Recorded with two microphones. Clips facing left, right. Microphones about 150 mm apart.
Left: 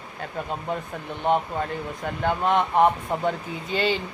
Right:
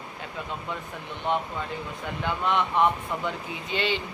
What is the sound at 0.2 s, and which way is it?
Speech, 45° left (ahead or behind).